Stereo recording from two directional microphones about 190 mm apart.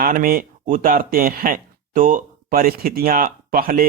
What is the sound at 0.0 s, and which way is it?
Speech, 45° right (ahead or behind).